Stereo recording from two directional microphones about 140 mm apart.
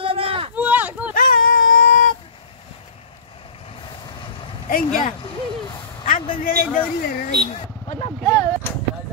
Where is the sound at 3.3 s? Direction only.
40° left (ahead or behind).